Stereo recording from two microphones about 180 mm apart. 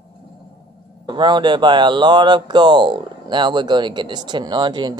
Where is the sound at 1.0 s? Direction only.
25° right (ahead or behind).